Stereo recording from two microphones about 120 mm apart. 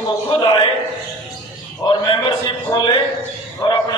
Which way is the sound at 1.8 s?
35° left (ahead or behind).